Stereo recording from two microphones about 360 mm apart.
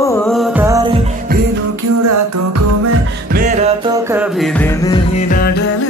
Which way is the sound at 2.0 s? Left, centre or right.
Right.